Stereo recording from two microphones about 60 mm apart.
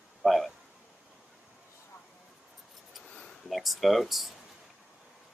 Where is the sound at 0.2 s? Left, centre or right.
Centre.